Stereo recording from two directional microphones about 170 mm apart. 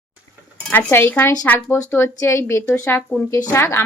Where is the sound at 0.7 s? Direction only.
15° left (ahead or behind).